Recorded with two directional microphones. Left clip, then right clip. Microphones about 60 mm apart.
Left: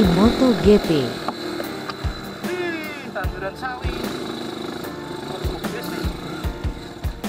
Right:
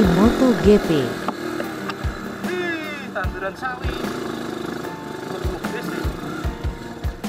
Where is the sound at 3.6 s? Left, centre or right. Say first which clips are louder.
Right 1 dB; centre.